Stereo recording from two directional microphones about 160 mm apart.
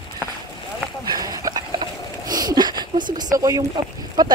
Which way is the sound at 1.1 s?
25° right (ahead or behind).